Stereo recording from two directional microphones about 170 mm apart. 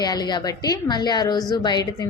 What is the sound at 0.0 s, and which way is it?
A woman's voice, 25° left (ahead or behind).